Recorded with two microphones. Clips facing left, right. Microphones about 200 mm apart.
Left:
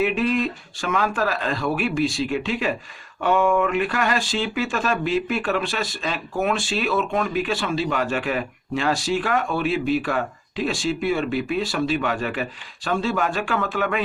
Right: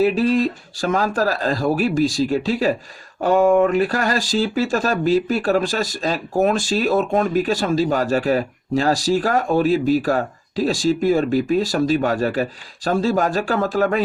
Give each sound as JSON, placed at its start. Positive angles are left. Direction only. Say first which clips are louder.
{"t": 0.0, "sound": "speech", "louder": "right 5 dB", "side_deg": -35}